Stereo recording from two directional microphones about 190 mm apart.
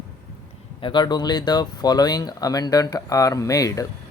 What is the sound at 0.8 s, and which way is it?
Speech, 25° left (ahead or behind).